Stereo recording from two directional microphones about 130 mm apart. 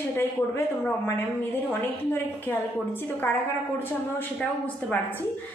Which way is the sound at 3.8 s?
15° left (ahead or behind).